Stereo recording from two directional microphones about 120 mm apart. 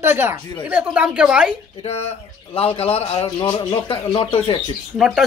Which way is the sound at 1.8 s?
60° left (ahead or behind).